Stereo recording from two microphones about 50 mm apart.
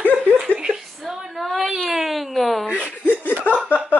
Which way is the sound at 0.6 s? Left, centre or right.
Centre.